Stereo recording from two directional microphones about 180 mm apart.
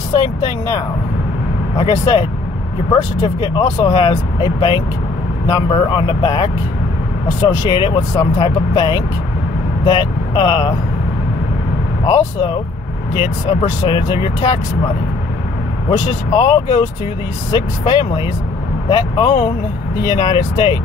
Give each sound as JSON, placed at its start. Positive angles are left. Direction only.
{"t": 0.1, "sound": "speech", "side_deg": 20}
{"t": 12.1, "sound": "speech", "side_deg": 25}
{"t": 16.1, "sound": "speech", "side_deg": 25}